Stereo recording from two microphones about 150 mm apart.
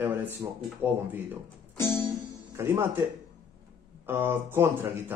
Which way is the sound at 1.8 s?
30° right (ahead or behind).